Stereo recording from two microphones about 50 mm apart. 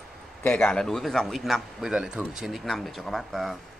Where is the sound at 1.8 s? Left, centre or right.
Centre.